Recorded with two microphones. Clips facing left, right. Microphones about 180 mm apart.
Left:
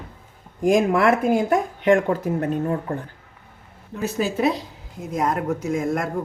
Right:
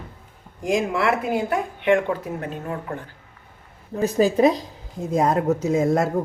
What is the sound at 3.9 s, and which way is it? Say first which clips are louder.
Speech: right 5 dB; 35° right (ahead or behind).